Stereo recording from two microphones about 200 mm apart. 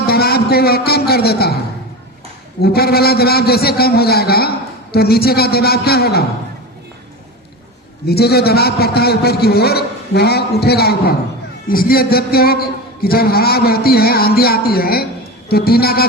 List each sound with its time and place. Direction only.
0.1 s a man's voice: 50° left (ahead or behind)
2.6 s a man's voice: 50° left (ahead or behind)
8.0 s a man's voice: 50° left (ahead or behind)